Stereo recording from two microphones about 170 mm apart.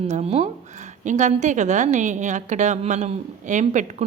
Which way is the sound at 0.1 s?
40° right (ahead or behind).